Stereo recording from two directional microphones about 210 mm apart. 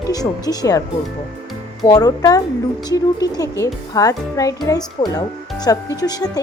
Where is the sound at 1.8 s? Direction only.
20° left (ahead or behind).